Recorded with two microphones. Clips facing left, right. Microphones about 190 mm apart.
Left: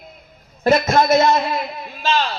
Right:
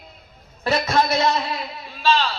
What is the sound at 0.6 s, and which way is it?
Speech, 45° left (ahead or behind).